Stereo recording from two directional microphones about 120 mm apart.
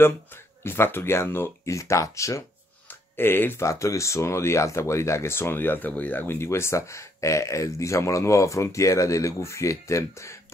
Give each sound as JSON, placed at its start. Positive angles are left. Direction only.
{"t": 0.7, "sound": "speech", "side_deg": 20}